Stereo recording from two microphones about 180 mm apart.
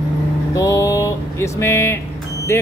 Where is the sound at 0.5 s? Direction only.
20° left (ahead or behind).